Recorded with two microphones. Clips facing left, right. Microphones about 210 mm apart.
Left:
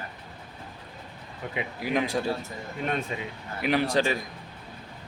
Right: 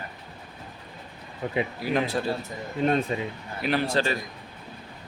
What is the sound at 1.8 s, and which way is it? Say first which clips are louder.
Speech: left 2 dB; 15° left (ahead or behind).